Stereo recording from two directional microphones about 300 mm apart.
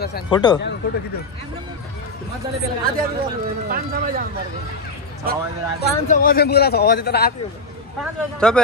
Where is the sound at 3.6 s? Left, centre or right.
Right.